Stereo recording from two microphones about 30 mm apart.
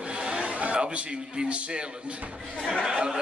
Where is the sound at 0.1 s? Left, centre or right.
Right.